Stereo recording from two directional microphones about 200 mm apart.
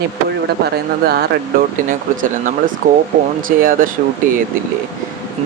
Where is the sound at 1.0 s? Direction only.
50° right (ahead or behind).